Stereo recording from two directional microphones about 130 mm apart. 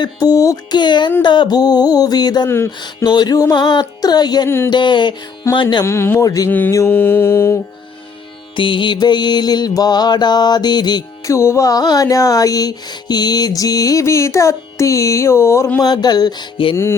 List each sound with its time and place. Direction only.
0.0 s music: 25° left (ahead or behind)
4.4 s a sound: 20° left (ahead or behind)
4.7 s music: 35° left (ahead or behind)
5.6 s mantra: 20° left (ahead or behind)
8.5 s mantra: 40° left (ahead or behind); by 15.8 s 20° left (ahead or behind)
15.8 s music: 30° left (ahead or behind)